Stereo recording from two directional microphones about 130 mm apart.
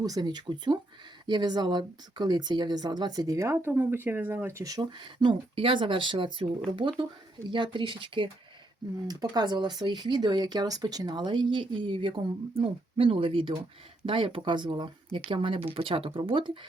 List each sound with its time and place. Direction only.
0.0 s speech: 30° right (ahead or behind)